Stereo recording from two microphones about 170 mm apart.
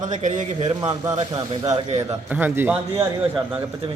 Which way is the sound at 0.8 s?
20° right (ahead or behind).